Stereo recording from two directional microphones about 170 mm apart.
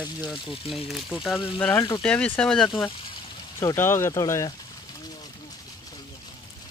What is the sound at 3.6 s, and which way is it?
Speech, 15° left (ahead or behind).